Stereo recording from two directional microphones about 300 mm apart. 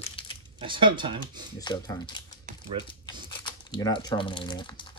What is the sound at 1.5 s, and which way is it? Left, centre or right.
Speech, centre.